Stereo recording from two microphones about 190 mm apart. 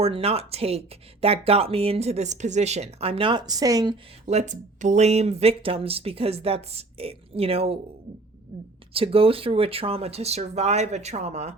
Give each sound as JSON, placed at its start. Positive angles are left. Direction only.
{"t": 0.0, "sound": "speech", "side_deg": -30}
{"t": 4.3, "sound": "speech", "side_deg": -40}
{"t": 8.9, "sound": "speech", "side_deg": -30}